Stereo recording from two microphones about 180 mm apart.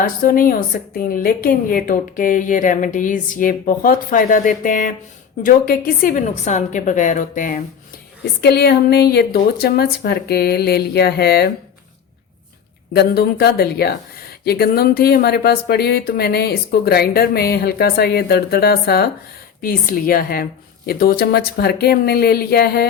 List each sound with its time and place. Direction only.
0.0 s a woman's voice: 50° left (ahead or behind)
8.4 s speech: 60° left (ahead or behind)
12.9 s speech: 60° left (ahead or behind)